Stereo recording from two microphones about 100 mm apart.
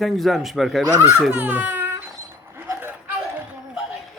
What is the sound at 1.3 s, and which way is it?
Speech, 15° right (ahead or behind).